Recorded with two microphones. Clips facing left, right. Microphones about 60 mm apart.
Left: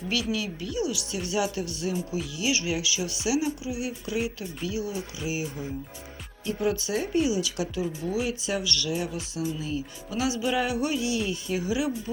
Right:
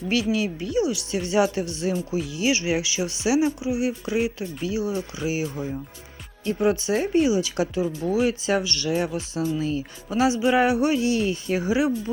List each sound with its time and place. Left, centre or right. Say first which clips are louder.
0.1 s speech: right 6 dB; right
4.9 s speech: right 5 dB; right
6.6 s speech: right 5 dB; right
8.6 s speech: right 4 dB; right
10.9 s speech: right 5 dB; right